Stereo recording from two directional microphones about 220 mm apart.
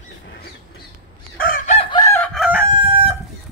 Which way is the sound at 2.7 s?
25° right (ahead or behind).